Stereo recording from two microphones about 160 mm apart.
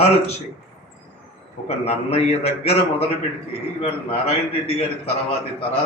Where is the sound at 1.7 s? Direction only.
40° left (ahead or behind).